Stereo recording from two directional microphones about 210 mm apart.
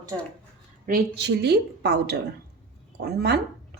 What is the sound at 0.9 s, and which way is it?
Speech, 50° right (ahead or behind).